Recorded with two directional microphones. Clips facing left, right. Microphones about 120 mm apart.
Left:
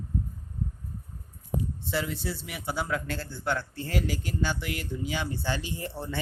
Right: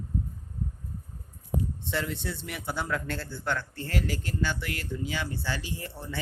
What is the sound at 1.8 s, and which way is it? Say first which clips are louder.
A man's voice: left 1 dB; 5° left (ahead or behind).